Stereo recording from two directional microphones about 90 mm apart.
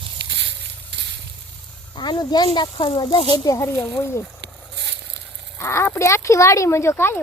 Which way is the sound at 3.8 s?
30° left (ahead or behind).